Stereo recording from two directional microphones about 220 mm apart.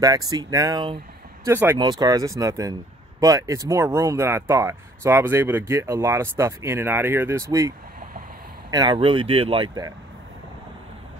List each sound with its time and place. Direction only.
0.0 s speech: 15° right (ahead or behind)